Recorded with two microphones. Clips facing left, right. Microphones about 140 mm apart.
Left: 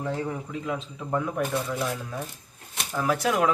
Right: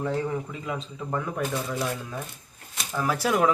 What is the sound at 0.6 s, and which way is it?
Speech, centre (ahead or behind).